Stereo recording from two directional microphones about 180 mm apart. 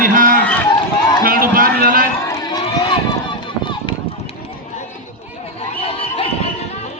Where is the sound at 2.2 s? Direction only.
25° left (ahead or behind).